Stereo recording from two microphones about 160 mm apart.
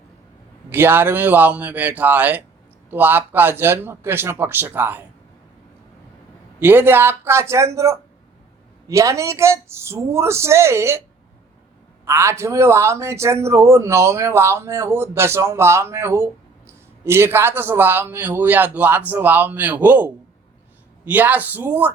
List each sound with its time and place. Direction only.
0.7 s speech: 15° right (ahead or behind)
6.6 s speech: 15° right (ahead or behind)
12.0 s speech: 15° right (ahead or behind)